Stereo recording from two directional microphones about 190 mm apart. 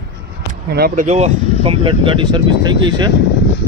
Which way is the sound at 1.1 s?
35° right (ahead or behind).